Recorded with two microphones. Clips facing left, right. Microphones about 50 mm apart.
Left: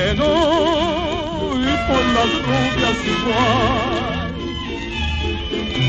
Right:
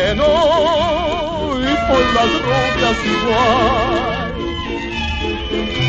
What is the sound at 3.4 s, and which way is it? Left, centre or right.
Music, right.